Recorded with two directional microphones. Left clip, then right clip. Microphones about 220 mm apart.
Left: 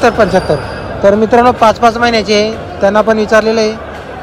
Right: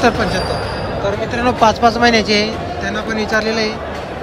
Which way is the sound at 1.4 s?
5° right (ahead or behind).